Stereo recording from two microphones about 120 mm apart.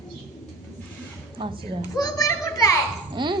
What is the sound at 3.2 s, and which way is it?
Speech, 40° right (ahead or behind).